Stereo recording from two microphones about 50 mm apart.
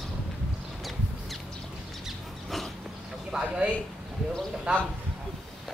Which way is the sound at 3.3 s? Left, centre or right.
Centre.